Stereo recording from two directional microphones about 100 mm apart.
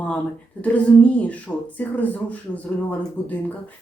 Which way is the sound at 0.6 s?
15° left (ahead or behind).